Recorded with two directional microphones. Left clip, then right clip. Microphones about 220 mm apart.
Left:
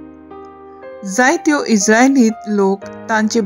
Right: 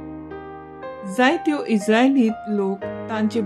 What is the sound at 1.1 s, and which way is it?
Speech, 25° left (ahead or behind).